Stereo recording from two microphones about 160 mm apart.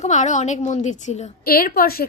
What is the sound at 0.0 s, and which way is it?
Speech, 45° left (ahead or behind).